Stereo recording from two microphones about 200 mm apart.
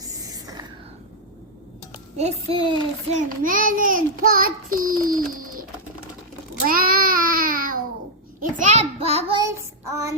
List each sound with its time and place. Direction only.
0.0 s a sound: 20° right (ahead or behind)
2.1 s a child's voice: 30° right (ahead or behind)
3.2 s a child's voice: 45° right (ahead or behind)
5.3 s pigeon: 45° right (ahead or behind)
6.7 s child singing: 45° right (ahead or behind)
8.4 s a child's voice: 40° right (ahead or behind)
9.4 s child singing: 15° right (ahead or behind)